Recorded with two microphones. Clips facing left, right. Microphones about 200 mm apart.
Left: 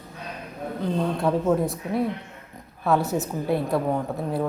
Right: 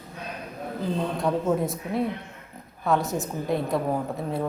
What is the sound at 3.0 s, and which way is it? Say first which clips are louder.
Speech: left 3 dB; 65° left (ahead or behind).